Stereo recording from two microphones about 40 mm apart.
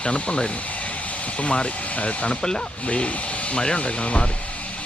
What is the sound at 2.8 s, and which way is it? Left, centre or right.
Speech, left.